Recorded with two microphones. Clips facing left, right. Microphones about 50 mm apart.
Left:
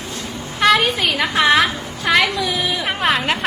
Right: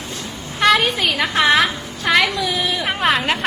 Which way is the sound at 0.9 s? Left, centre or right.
Centre.